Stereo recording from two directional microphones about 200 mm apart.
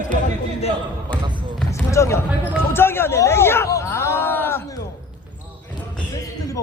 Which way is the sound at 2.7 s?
10° left (ahead or behind).